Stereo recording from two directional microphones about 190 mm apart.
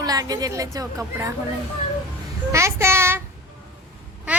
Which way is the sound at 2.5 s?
15° right (ahead or behind).